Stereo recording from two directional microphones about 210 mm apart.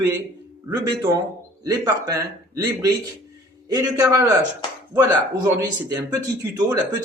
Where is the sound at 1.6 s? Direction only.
15° right (ahead or behind).